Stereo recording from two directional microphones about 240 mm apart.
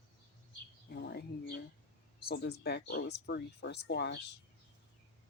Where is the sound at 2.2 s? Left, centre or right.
Left.